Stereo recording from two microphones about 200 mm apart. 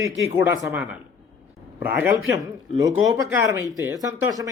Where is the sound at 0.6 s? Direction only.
5° right (ahead or behind).